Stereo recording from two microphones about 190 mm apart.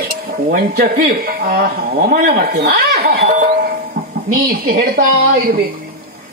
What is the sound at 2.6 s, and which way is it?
Speech, 40° right (ahead or behind).